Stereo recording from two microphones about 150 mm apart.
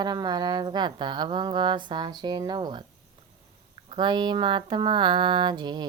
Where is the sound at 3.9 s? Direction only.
30° right (ahead or behind).